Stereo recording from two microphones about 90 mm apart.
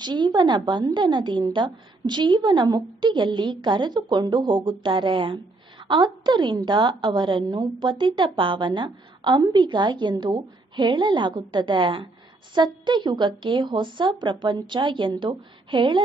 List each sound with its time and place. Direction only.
0.0 s a woman's voice: 55° right (ahead or behind)
9.4 s a woman's voice: 55° right (ahead or behind)